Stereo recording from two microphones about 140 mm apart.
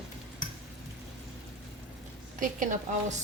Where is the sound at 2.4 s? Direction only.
70° right (ahead or behind).